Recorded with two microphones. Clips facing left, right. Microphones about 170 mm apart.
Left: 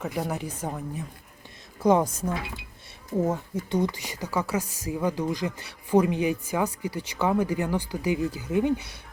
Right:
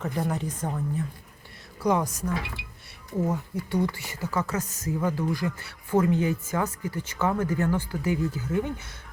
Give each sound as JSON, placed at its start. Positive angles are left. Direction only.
{"t": 0.0, "sound": "speech", "side_deg": 10}
{"t": 1.8, "sound": "speech", "side_deg": 25}
{"t": 3.1, "sound": "speech", "side_deg": 25}